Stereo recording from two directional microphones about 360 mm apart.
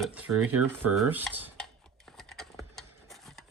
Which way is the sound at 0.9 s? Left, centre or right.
Centre.